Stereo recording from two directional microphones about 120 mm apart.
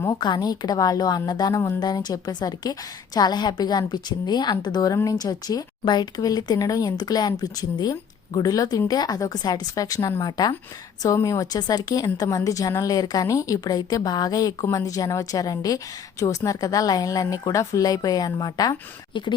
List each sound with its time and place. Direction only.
0.0 s a woman's voice: 35° left (ahead or behind)